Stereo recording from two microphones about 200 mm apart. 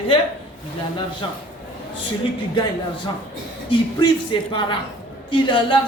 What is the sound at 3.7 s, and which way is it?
A man's voice, 25° left (ahead or behind).